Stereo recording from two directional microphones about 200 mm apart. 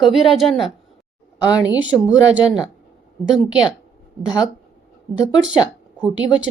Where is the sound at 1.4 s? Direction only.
20° left (ahead or behind).